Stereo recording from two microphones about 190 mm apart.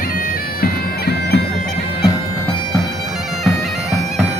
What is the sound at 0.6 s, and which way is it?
Bagpipes, 60° left (ahead or behind).